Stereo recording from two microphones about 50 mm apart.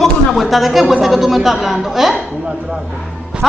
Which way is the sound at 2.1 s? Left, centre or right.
Centre.